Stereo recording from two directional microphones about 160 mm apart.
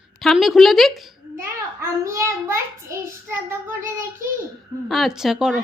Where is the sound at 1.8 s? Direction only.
15° right (ahead or behind).